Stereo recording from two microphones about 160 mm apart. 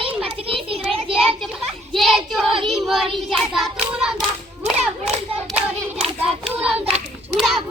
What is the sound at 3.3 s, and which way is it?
Hands, centre (ahead or behind).